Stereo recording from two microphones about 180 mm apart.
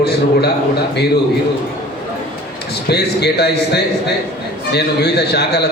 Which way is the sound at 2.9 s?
65° left (ahead or behind).